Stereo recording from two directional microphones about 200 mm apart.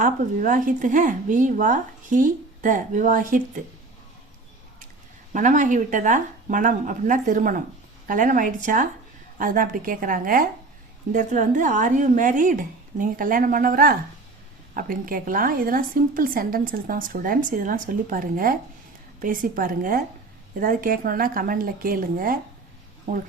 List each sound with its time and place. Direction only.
0.0 s speech: 40° right (ahead or behind)
5.3 s a woman's voice: 40° right (ahead or behind)